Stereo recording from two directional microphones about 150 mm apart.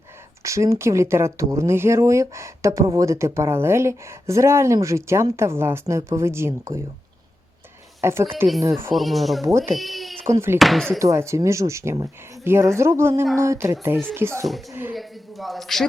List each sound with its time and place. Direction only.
0.4 s speech: 20° right (ahead or behind)
8.0 s speech: 15° right (ahead or behind)
8.9 s a man's voice: centre (ahead or behind)
10.2 s speech: 15° right (ahead or behind)
10.6 s a man's voice: centre (ahead or behind)
11.0 s speech: 20° right (ahead or behind)
14.9 s a man's voice: centre (ahead or behind)